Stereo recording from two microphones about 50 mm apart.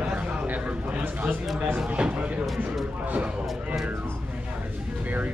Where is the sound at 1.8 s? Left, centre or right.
Right.